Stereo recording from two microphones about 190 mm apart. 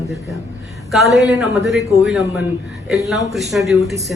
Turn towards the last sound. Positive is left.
turn(degrees=0)  # may be behind; listen again after turning